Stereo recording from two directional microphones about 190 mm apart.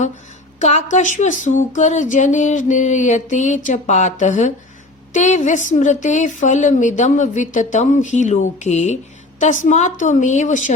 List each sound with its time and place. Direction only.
0.6 s speech: 40° left (ahead or behind)